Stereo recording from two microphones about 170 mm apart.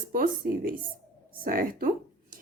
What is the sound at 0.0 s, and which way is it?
Speech, 55° right (ahead or behind).